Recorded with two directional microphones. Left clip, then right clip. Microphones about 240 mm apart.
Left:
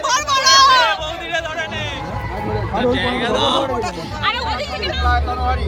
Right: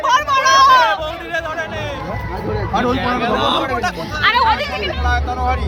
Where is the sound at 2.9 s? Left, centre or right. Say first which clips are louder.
Right 1 dB; right.